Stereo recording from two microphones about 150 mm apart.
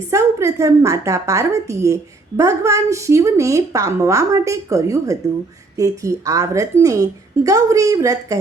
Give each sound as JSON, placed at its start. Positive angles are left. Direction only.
{"t": 0.1, "sound": "a woman's voice", "side_deg": -20}